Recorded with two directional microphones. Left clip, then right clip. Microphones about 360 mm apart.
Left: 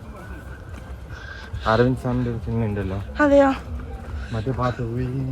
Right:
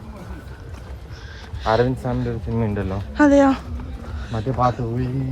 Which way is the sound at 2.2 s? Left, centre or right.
Centre.